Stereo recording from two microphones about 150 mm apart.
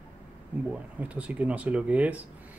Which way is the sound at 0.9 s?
10° right (ahead or behind).